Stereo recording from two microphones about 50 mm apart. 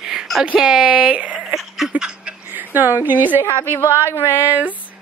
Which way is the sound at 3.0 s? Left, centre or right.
Right.